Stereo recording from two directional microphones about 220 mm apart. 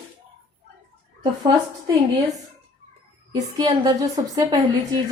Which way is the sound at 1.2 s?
20° right (ahead or behind).